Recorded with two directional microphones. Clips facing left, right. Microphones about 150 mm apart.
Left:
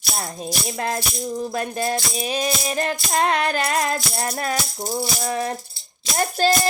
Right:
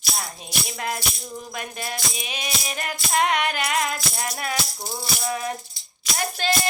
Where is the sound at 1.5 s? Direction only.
35° left (ahead or behind).